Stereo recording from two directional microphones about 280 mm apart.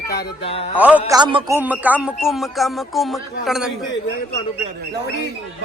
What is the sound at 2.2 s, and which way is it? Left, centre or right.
Speech, centre.